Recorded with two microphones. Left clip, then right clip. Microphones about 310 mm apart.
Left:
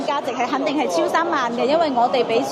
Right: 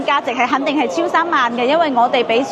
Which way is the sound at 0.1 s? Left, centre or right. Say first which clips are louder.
Right 7 dB; right.